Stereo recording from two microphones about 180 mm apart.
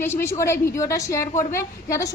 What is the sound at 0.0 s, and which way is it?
A woman's voice, 15° left (ahead or behind).